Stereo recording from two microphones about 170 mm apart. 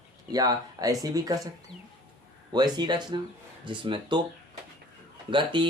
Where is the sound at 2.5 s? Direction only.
25° right (ahead or behind).